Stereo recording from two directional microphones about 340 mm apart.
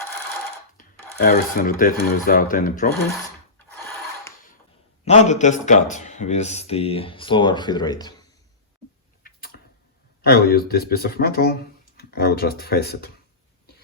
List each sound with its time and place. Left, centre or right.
0.8 s a sound: left
1.1 s speech: left
5.0 s speech: centre
10.2 s speech: left